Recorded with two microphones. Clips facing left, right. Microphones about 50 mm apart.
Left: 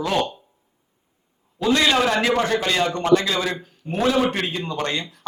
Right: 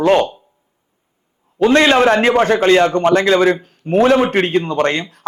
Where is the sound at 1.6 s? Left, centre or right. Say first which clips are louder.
Right 8 dB; right.